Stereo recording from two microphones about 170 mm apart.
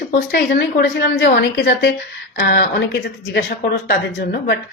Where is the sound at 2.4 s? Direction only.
65° left (ahead or behind).